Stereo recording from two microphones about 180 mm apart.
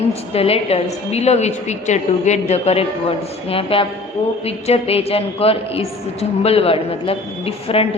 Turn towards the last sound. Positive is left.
turn(degrees=30)  # may be behind; listen again after turning